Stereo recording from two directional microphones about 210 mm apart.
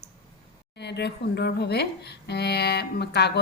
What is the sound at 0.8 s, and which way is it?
Speech, 55° left (ahead or behind).